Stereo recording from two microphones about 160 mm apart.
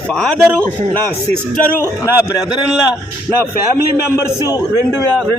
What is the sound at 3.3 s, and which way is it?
Speech, 5° left (ahead or behind).